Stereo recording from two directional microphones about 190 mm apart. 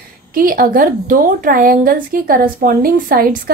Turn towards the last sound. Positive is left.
turn(degrees=-50)  # may be behind; listen again after turning